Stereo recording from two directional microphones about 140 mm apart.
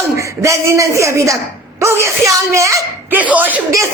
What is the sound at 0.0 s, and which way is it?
Speech, 20° right (ahead or behind).